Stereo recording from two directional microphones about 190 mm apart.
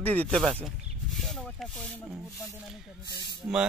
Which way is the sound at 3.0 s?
25° left (ahead or behind).